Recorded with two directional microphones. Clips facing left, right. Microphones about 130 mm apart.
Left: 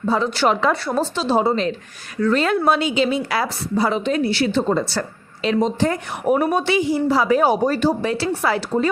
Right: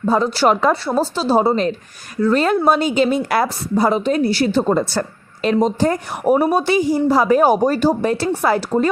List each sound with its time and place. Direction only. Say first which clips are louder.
0.0 s a woman's voice: right 3 dB; 40° right (ahead or behind)